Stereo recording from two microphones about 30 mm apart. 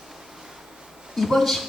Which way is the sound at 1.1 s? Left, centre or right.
Centre.